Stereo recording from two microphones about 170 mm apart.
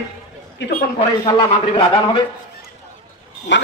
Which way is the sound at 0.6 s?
90° left.